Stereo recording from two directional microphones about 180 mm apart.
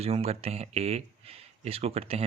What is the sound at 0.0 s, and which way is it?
Speech, 35° right (ahead or behind).